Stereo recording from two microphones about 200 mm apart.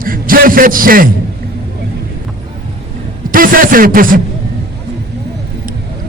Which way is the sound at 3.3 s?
45° right (ahead or behind).